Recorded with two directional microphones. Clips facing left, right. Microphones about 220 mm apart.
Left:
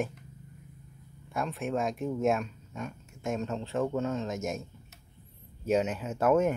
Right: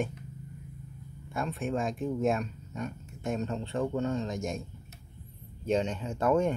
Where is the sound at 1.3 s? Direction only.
Centre (ahead or behind).